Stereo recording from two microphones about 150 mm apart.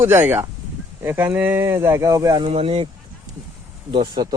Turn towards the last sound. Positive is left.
turn(degrees=-30)  # may be behind; listen again after turning